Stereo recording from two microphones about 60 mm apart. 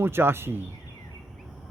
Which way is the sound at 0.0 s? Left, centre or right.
Right.